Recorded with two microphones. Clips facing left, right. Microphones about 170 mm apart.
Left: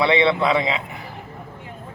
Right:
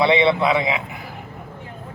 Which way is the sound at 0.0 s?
15° right (ahead or behind).